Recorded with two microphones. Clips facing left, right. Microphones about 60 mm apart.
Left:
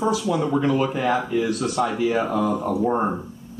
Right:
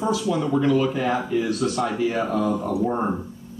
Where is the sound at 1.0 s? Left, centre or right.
Left.